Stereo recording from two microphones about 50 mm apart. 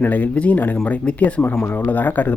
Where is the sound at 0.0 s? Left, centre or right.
Left.